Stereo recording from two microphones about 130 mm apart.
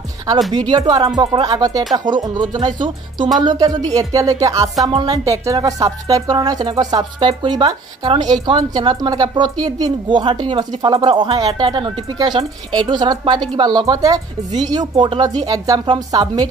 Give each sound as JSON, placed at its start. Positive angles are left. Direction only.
{"t": 0.5, "sound": "a woman's voice", "side_deg": -30}